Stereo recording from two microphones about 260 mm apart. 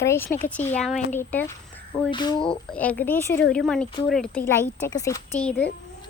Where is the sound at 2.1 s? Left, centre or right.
Centre.